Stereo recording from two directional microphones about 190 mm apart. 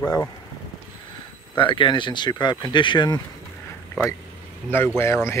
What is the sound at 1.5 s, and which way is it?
Speech, 25° left (ahead or behind).